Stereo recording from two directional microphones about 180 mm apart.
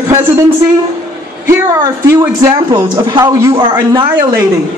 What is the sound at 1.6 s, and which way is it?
A woman's voice, 15° right (ahead or behind).